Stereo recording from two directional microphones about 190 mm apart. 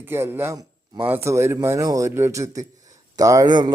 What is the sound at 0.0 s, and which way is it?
Speech, 10° right (ahead or behind).